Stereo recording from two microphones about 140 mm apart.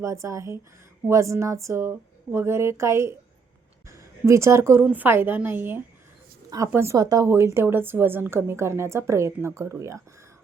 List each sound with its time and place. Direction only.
0.0 s a woman's voice: 20° right (ahead or behind)